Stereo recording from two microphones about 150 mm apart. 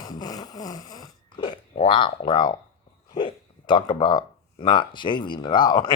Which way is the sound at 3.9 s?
30° left (ahead or behind).